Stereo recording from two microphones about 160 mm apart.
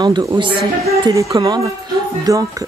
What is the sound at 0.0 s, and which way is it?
Speech, 25° right (ahead or behind).